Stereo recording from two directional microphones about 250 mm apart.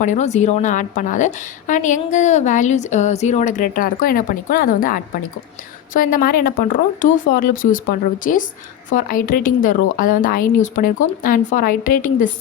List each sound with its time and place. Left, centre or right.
0.0 s a woman's voice: left